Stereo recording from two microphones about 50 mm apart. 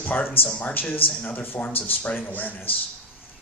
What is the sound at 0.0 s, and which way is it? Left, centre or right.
Speech, left.